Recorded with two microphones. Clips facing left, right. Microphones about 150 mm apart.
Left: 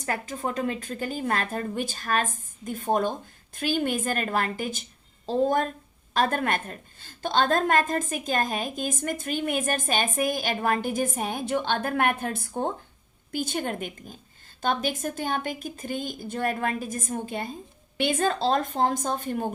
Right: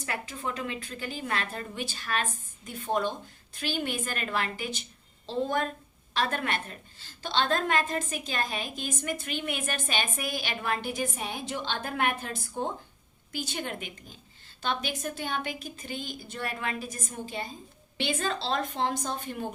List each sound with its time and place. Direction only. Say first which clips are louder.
0.0 s a woman's voice: left 5 dB; 40° left (ahead or behind)